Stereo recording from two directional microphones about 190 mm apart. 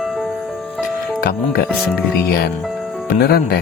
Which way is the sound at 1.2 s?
55° left (ahead or behind).